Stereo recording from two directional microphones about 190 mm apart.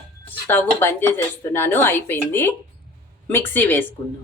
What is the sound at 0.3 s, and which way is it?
Speech, 10° left (ahead or behind).